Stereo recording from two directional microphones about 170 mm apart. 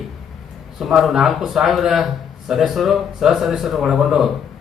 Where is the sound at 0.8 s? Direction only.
Centre (ahead or behind).